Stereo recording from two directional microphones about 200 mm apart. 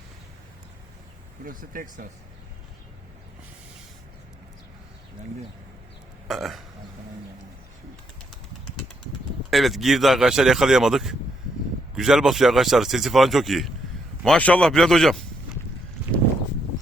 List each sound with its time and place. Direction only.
1.5 s speech: 45° right (ahead or behind)
6.2 s burping: centre (ahead or behind)
9.5 s speech: centre (ahead or behind)